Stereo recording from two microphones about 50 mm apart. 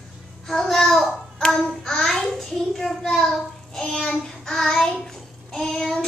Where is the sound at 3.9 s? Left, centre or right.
Centre.